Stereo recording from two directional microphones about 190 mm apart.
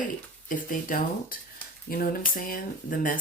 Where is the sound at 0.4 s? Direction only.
45° left (ahead or behind).